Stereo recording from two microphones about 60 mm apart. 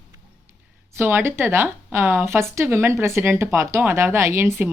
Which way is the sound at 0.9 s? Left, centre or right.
Right.